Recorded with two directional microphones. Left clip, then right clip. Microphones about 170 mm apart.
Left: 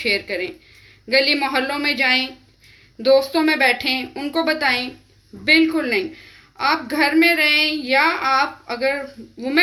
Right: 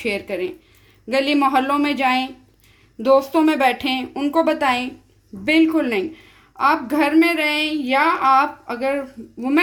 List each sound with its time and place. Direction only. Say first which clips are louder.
0.0 s a woman's voice: left 2 dB; 60° right (ahead or behind)